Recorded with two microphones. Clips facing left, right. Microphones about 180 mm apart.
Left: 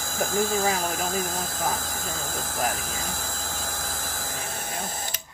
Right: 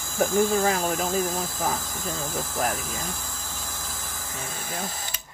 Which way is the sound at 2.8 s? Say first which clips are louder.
Even; 90° left.